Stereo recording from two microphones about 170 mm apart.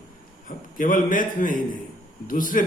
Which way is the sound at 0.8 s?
50° left (ahead or behind).